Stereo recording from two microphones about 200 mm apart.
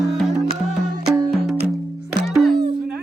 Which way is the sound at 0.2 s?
Centre (ahead or behind).